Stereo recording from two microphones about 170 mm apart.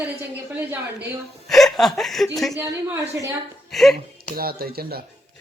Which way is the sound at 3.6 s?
Centre (ahead or behind).